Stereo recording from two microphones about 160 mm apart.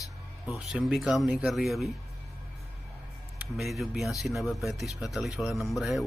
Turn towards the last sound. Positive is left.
turn(degrees=0)  # may be behind; listen again after turning